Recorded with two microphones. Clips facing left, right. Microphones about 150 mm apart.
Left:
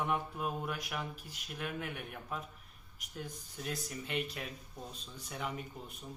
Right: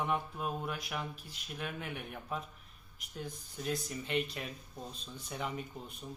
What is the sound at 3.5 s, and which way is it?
Speech, 5° left (ahead or behind).